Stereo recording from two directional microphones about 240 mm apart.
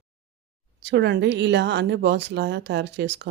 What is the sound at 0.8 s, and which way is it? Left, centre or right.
Speech, right.